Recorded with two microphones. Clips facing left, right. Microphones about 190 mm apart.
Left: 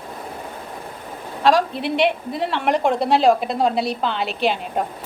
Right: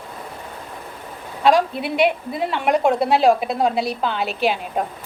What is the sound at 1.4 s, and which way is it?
A woman's voice, 5° right (ahead or behind).